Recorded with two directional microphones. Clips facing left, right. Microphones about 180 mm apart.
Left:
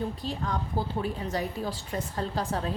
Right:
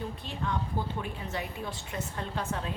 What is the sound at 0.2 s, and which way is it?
A woman's voice, 40° left (ahead or behind).